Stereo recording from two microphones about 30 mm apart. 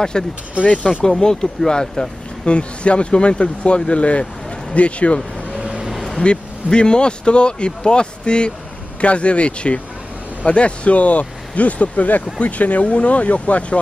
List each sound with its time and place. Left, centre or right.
0.1 s speech: left
0.6 s speech: right
1.2 s speech: left
2.4 s speech: left
6.3 s speech: left
9.0 s speech: left